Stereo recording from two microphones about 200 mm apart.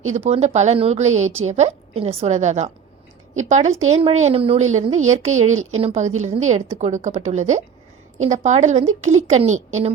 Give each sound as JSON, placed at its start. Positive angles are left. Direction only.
{"t": 0.1, "sound": "a woman's voice", "side_deg": -30}